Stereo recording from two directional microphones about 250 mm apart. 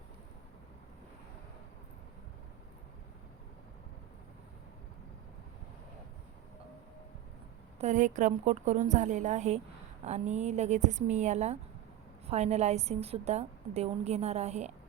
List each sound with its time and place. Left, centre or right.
7.8 s a woman's voice: right